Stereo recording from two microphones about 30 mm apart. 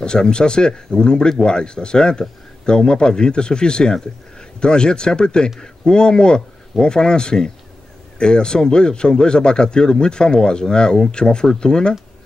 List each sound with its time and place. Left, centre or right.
0.0 s a man's voice: left